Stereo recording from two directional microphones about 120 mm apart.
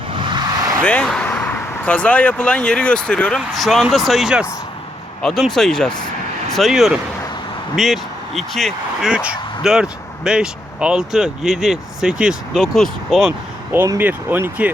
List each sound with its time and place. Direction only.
0.1 s a sound: 40° right (ahead or behind)
0.8 s speech: 10° left (ahead or behind)
13.7 s speech: 25° right (ahead or behind)
14.0 s speech: 15° right (ahead or behind)